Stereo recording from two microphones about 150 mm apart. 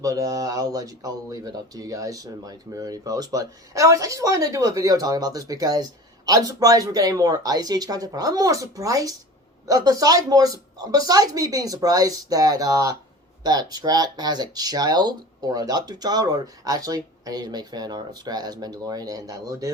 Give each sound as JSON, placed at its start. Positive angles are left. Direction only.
{"t": 0.0, "sound": "speech", "side_deg": -20}